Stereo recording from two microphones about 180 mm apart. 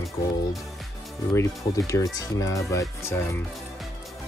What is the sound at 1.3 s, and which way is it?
Speech, 15° left (ahead or behind).